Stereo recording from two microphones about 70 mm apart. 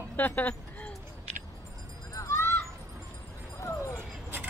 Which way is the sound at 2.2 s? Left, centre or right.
Left.